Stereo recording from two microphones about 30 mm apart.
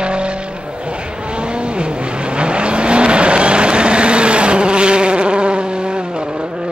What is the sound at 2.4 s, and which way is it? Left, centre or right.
Vehicle, right.